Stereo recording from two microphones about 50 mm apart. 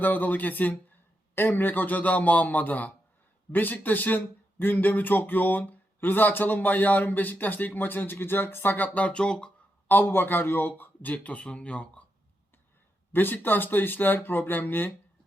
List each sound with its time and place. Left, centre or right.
0.0 s speech: left
9.0 s speech: left
9.9 s speech: left
13.1 s speech: left